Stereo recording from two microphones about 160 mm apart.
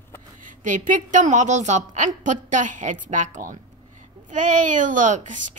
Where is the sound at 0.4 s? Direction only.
55° right (ahead or behind).